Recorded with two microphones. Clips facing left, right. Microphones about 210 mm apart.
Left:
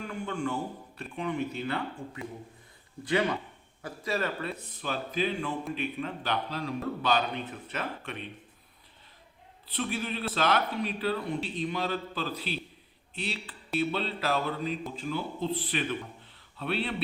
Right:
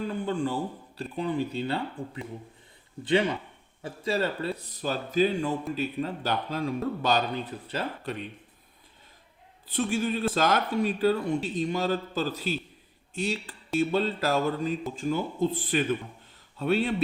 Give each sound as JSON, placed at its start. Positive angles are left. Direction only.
{"t": 0.0, "sound": "a man's voice", "side_deg": -35}
{"t": 9.6, "sound": "speech", "side_deg": -45}